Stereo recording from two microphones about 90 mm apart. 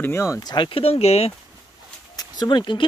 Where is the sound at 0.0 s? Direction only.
30° left (ahead or behind).